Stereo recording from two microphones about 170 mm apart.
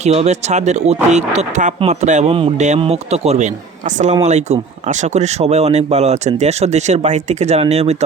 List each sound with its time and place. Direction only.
0.0 s speech: 40° right (ahead or behind)